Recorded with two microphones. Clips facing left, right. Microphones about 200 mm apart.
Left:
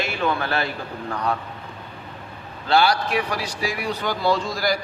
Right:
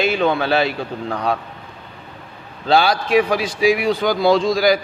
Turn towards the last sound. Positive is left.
turn(degrees=-90)